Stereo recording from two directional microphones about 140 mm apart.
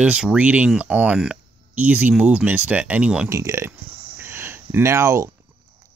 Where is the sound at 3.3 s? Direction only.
20° right (ahead or behind).